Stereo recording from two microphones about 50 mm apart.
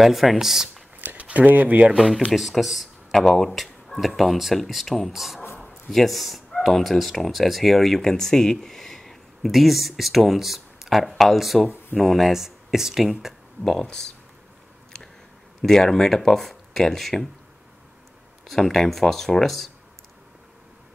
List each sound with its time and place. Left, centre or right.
0.0 s speech: centre
1.0 s speech: right
2.0 s speech: centre
13.7 s speech: centre
15.6 s speech: centre
18.4 s speech: centre